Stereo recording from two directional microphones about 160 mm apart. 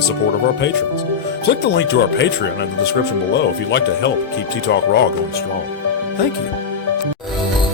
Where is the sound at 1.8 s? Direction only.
90° left.